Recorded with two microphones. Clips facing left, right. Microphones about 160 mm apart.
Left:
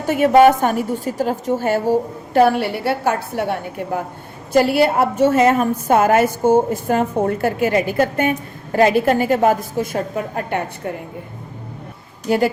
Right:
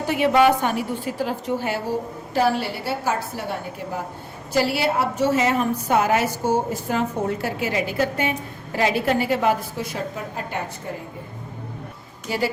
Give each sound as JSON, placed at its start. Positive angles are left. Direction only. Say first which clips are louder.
{"t": 0.1, "sound": "a woman's voice", "louder": "left 6 dB", "side_deg": 45}
{"t": 2.3, "sound": "a woman's voice", "louder": "left 7 dB", "side_deg": 60}